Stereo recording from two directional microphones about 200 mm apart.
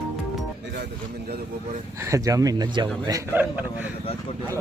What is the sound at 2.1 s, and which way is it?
A man's voice, 15° right (ahead or behind).